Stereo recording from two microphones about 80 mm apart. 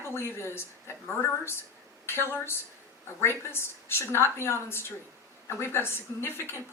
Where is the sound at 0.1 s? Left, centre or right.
Left.